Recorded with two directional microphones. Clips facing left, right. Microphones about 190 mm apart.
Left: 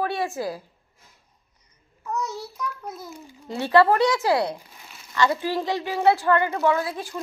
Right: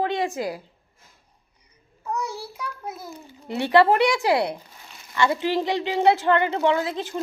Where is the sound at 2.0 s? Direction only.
10° right (ahead or behind).